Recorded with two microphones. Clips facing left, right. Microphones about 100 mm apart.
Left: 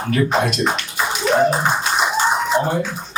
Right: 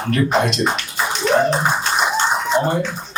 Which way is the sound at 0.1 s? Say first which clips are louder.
Right 1 dB; 5° left (ahead or behind).